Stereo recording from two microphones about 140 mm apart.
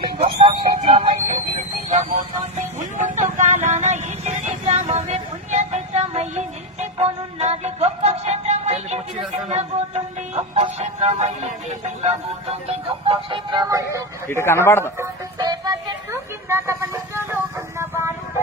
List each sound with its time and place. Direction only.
0.3 s a sound: 35° right (ahead or behind)
1.5 s a sound: 60° right (ahead or behind)
2.6 s music: 60° right (ahead or behind)
12.5 s music: 45° right (ahead or behind); by 14.0 s 20° right (ahead or behind)
14.3 s speech: 20° left (ahead or behind)
14.9 s music: 25° right (ahead or behind)